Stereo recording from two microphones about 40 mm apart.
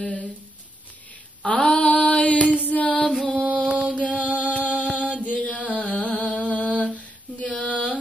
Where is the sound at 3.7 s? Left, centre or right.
Right.